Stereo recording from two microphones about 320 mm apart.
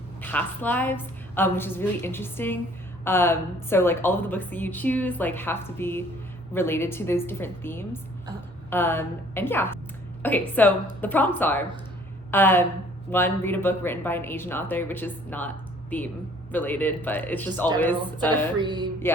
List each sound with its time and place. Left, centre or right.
0.2 s a woman's voice: centre
16.5 s a woman's voice: centre
18.5 s music: centre